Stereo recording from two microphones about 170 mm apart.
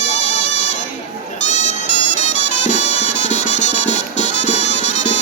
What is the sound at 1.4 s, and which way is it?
Music, 45° left (ahead or behind).